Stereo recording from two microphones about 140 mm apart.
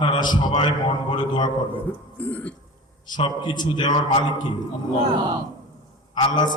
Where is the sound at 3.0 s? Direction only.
30° left (ahead or behind).